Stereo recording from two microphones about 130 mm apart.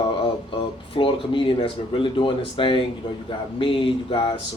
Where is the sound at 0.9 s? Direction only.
40° left (ahead or behind).